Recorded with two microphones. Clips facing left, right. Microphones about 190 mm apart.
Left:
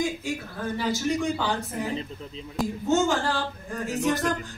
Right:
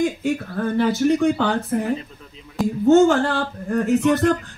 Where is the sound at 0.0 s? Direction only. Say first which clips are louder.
Right 7 dB; 60° right (ahead or behind).